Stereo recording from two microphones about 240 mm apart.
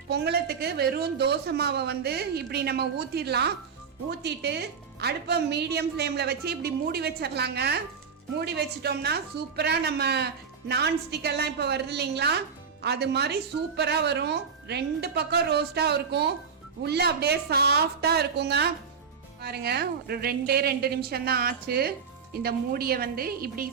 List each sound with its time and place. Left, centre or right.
0.1 s a woman's voice: right